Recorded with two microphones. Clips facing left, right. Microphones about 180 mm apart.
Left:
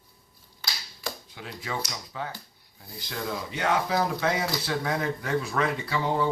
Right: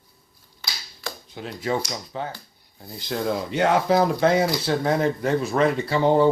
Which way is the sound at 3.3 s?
55° right (ahead or behind).